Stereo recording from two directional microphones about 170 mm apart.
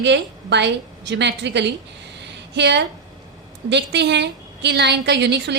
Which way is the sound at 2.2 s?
90° right.